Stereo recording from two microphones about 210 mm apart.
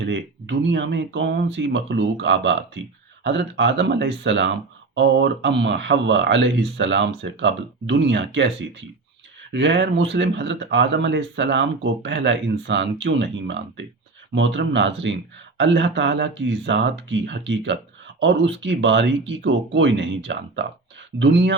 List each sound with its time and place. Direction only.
0.0 s speech: 60° right (ahead or behind)